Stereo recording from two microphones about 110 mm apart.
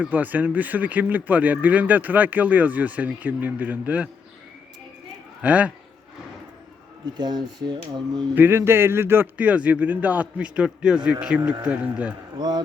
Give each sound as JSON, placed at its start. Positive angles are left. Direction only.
{"t": 0.0, "sound": "speech", "side_deg": -15}
{"t": 5.4, "sound": "speech", "side_deg": -15}
{"t": 7.0, "sound": "speech", "side_deg": -40}
{"t": 8.4, "sound": "speech", "side_deg": -20}
{"t": 12.4, "sound": "speech", "side_deg": -40}